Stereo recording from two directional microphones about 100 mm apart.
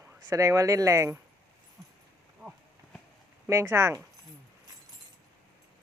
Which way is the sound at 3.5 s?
30° right (ahead or behind).